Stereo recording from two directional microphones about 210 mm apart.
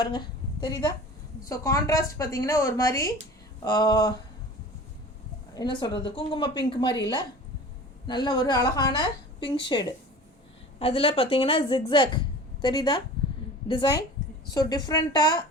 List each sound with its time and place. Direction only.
0.0 s a woman's voice: 20° left (ahead or behind)
5.5 s a woman's voice: 20° left (ahead or behind)